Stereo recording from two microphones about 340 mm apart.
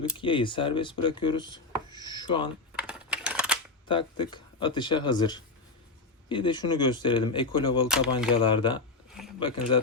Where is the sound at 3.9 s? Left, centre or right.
Centre.